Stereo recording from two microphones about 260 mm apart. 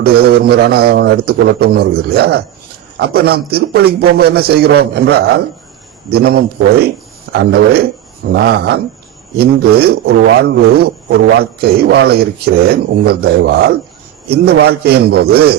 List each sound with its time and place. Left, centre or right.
0.0 s a man's voice: right